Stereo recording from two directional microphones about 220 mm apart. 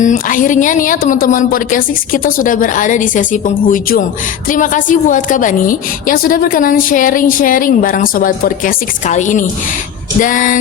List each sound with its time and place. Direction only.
0.0 s a woman's voice: 35° left (ahead or behind)